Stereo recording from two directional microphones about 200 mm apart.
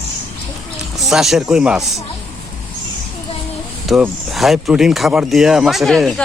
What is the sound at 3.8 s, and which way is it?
Speech, centre (ahead or behind).